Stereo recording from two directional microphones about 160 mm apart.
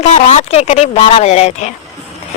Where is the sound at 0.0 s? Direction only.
45° left (ahead or behind).